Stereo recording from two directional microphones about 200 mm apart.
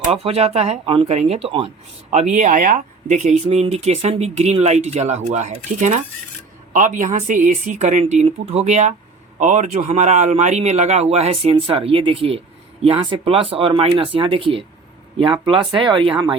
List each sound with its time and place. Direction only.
0.1 s speech: 30° right (ahead or behind)